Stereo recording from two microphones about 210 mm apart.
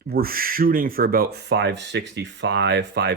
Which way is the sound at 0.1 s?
45° right (ahead or behind).